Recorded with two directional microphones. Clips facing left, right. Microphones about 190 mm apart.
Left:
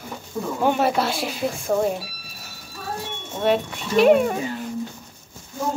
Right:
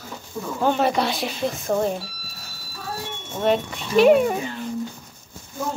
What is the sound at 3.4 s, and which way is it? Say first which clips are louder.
A woman's voice: even; centre (ahead or behind).